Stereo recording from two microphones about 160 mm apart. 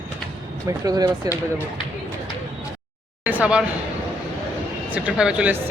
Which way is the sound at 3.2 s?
10° right (ahead or behind).